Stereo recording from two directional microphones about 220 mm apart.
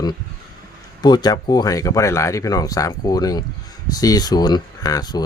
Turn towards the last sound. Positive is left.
turn(degrees=20)  # may be behind; listen again after turning